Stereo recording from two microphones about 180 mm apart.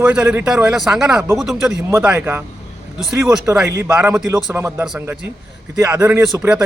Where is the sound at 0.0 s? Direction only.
5° right (ahead or behind).